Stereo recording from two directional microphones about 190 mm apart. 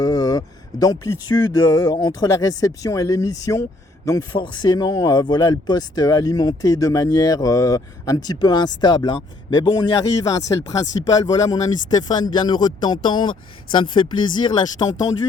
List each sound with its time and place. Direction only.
0.0 s speech: 20° left (ahead or behind)